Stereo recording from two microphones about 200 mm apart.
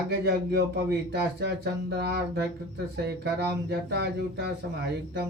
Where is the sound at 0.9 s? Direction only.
55° right (ahead or behind).